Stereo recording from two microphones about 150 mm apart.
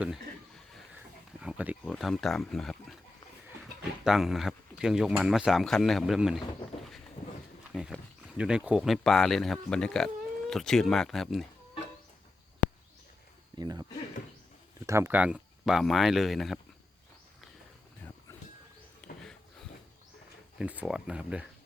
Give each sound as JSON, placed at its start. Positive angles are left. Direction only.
{"t": 1.4, "sound": "wild animals", "side_deg": -10}
{"t": 1.8, "sound": "speech", "side_deg": 0}
{"t": 4.0, "sound": "speech", "side_deg": 0}
{"t": 7.7, "sound": "speech", "side_deg": 0}
{"t": 13.6, "sound": "a sound", "side_deg": -30}
{"t": 14.8, "sound": "speech", "side_deg": -20}
{"t": 19.0, "sound": "a sound", "side_deg": 5}
{"t": 20.6, "sound": "speech", "side_deg": -5}